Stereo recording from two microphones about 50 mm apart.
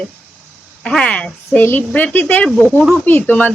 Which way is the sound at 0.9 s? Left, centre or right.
Left.